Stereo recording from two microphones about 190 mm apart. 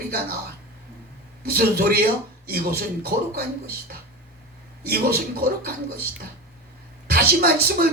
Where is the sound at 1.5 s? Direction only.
55° right (ahead or behind).